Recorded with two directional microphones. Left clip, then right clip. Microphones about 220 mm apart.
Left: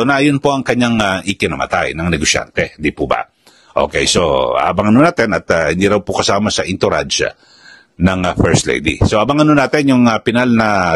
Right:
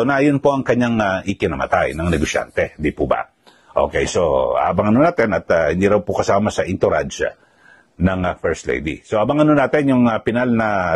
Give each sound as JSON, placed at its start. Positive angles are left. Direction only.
{"t": 0.2, "sound": "a man's voice", "side_deg": 30}